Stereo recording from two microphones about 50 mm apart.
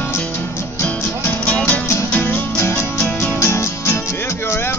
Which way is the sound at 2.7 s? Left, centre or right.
Left.